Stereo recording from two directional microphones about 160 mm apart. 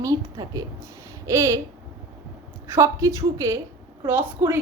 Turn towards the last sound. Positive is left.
turn(degrees=-15)  # may be behind; listen again after turning